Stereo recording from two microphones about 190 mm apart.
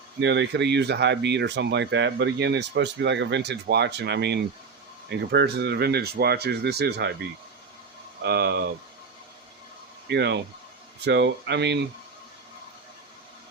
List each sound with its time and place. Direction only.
0.2 s speech: 65° right (ahead or behind)
8.2 s speech: 60° right (ahead or behind)
10.1 s speech: 65° right (ahead or behind)